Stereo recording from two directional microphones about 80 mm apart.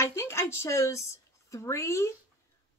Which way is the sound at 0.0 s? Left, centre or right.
Left.